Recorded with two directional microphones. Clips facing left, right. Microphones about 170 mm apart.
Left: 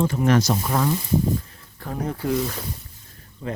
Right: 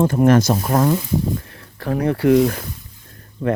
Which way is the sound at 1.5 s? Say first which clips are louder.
Right 9 dB; 75° right (ahead or behind).